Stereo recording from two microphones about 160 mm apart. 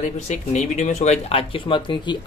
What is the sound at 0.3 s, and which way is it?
Speech, 45° left (ahead or behind).